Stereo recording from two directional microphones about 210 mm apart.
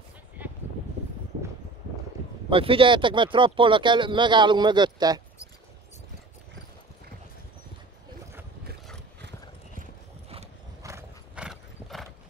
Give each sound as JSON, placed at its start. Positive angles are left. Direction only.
{"t": 0.4, "sound": "a sound", "side_deg": -10}
{"t": 2.5, "sound": "speech", "side_deg": -25}
{"t": 10.8, "sound": "horse", "side_deg": -15}